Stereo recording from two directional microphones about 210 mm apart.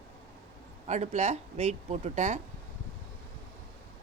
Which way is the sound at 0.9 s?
35° right (ahead or behind).